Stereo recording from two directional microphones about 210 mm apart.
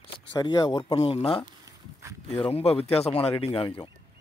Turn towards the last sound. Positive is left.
turn(degrees=25)  # may be behind; listen again after turning